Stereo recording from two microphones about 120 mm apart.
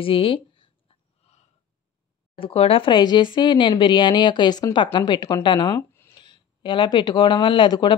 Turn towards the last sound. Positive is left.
turn(degrees=40)  # may be behind; listen again after turning